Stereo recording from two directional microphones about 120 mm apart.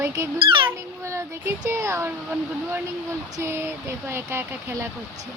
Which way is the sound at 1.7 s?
25° right (ahead or behind).